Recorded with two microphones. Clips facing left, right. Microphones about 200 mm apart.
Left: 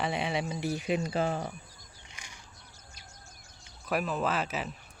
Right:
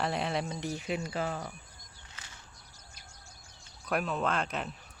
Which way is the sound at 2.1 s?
15° left (ahead or behind).